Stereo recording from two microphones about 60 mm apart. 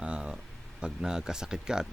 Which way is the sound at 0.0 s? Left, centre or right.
Centre.